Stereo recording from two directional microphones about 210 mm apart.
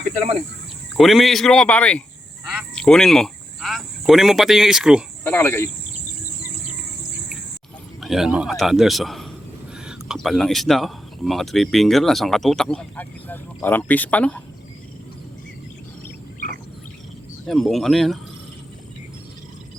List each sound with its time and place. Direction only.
0.0 s cricket: 30° right (ahead or behind)
0.9 s speech: centre (ahead or behind)
5.2 s speech: 10° left (ahead or behind)
8.0 s speech: centre (ahead or behind)
17.4 s speech: centre (ahead or behind)